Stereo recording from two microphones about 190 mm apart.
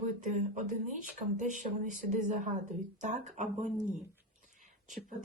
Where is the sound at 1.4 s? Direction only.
40° right (ahead or behind).